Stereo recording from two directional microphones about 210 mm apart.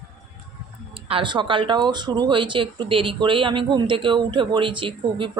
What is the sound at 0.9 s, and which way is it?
Speech, 25° right (ahead or behind).